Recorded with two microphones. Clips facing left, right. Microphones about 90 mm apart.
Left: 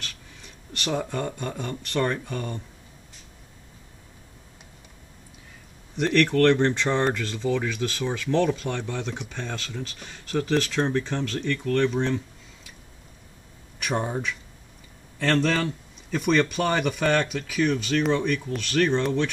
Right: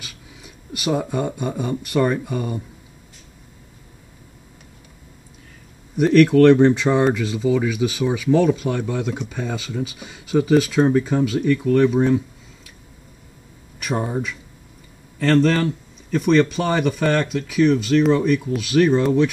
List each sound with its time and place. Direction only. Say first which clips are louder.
0.0 s speech: right 1 dB; 10° right (ahead or behind)
5.9 s speech: right 8 dB; 10° right (ahead or behind)
13.7 s a man's voice: right 4 dB; 5° right (ahead or behind)